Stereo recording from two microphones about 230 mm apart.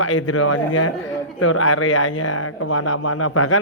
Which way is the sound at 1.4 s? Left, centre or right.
Left.